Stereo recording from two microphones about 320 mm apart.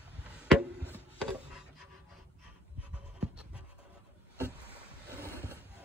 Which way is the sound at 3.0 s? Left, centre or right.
Centre.